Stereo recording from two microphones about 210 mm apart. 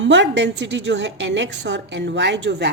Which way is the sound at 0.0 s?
60° right (ahead or behind).